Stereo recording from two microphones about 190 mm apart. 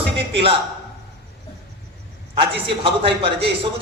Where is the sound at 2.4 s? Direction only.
30° right (ahead or behind).